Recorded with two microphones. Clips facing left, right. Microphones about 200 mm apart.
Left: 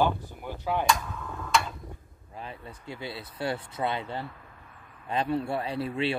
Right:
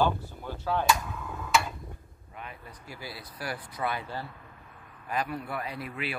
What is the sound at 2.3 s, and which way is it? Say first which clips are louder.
Speech: left 3 dB; 30° left (ahead or behind).